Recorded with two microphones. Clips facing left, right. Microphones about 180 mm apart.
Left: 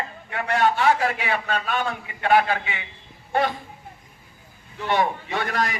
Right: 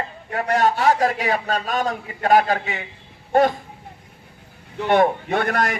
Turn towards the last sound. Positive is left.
turn(degrees=-50)  # may be behind; listen again after turning